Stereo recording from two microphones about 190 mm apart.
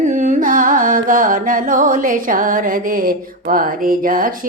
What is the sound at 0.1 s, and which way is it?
Carnatic music, 45° right (ahead or behind).